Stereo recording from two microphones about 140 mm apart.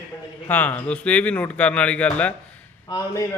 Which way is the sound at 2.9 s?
25° left (ahead or behind).